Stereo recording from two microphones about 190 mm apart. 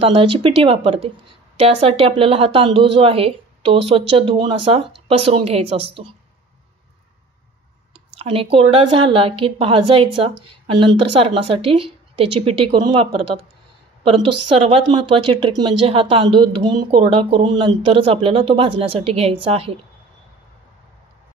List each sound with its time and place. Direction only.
0.0 s a woman's voice: 30° right (ahead or behind)
7.9 s speech: 30° right (ahead or behind)